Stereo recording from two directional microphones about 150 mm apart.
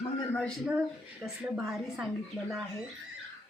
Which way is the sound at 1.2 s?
5° right (ahead or behind).